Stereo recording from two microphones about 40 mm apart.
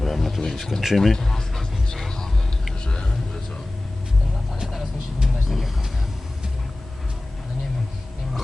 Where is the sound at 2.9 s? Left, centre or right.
Centre.